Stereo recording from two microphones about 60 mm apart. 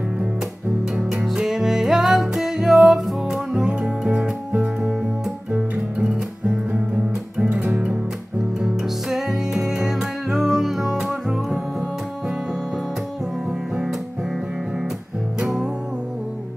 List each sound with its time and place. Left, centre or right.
0.9 s music: centre
8.5 s music: centre
15.4 s music: centre